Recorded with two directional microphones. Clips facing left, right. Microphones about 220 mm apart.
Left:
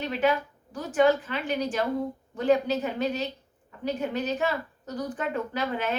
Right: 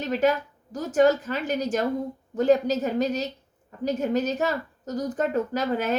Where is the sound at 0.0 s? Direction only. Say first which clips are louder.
Right 3 dB; 40° right (ahead or behind).